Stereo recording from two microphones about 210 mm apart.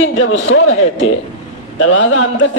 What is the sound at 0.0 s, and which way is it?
A man's voice, 65° left (ahead or behind).